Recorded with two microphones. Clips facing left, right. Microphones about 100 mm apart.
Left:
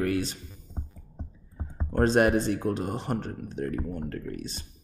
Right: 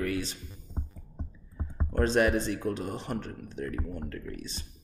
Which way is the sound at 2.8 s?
50° left (ahead or behind).